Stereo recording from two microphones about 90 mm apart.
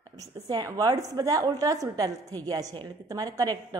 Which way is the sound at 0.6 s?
40° right (ahead or behind).